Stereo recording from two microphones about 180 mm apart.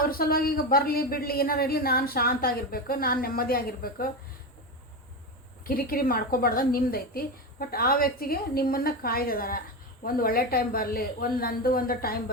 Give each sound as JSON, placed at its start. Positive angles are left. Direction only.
{"t": 0.0, "sound": "speech", "side_deg": 55}
{"t": 5.6, "sound": "speech", "side_deg": 55}